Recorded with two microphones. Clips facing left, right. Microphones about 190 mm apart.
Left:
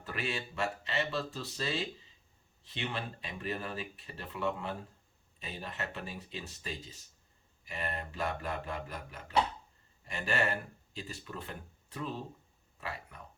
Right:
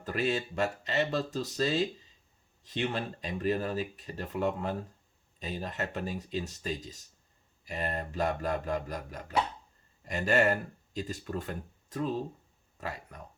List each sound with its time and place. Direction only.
0.0 s speech: 40° right (ahead or behind)